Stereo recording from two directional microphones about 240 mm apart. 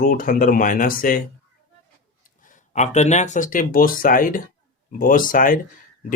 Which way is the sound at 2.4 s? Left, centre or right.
Left.